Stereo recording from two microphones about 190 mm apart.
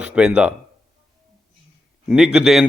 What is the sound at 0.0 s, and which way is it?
Speech, 5° right (ahead or behind).